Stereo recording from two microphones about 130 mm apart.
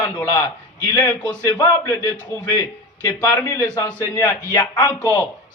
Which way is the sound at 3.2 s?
15° left (ahead or behind).